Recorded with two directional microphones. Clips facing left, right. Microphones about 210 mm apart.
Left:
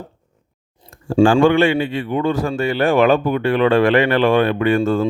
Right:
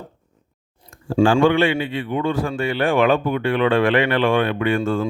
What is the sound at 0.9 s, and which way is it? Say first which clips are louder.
Speech: left 3 dB; 40° left (ahead or behind).